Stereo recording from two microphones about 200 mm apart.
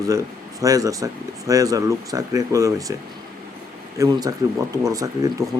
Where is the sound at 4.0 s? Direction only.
15° right (ahead or behind).